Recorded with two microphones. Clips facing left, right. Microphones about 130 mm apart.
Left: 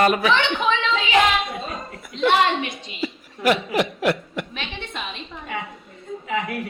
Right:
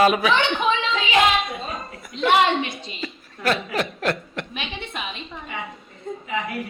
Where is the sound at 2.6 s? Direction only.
25° right (ahead or behind).